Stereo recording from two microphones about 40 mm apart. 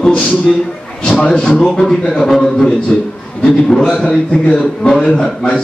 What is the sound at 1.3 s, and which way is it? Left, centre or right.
Speech, left.